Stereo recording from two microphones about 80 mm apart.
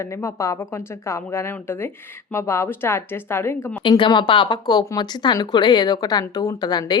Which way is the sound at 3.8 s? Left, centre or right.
Left.